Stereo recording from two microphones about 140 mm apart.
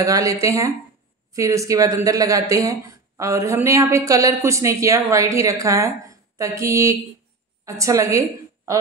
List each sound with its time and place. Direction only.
0.0 s speech: 25° right (ahead or behind)